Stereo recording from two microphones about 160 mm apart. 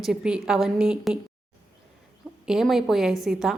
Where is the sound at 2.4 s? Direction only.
Centre (ahead or behind).